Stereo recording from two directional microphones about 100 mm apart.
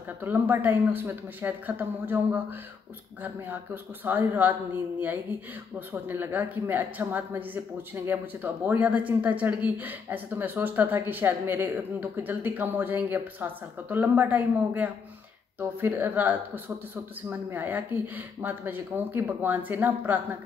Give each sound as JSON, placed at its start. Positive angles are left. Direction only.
{"t": 0.2, "sound": "speech", "side_deg": -20}
{"t": 5.8, "sound": "speech", "side_deg": -20}